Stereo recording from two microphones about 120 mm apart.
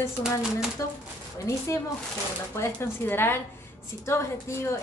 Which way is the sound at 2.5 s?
20° left (ahead or behind).